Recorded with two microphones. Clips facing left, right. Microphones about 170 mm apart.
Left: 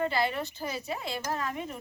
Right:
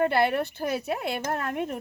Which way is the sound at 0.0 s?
60° right (ahead or behind).